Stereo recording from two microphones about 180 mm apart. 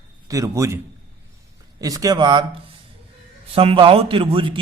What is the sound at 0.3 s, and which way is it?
Speech, 20° right (ahead or behind).